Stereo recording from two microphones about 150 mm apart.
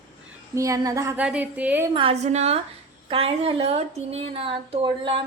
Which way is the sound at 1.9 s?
40° right (ahead or behind).